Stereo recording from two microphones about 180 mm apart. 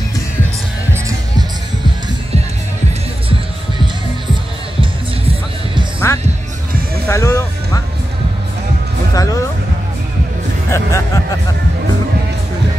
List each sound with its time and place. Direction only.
6.1 s music: 15° left (ahead or behind)
9.1 s music: 20° left (ahead or behind)
10.7 s music: 15° left (ahead or behind)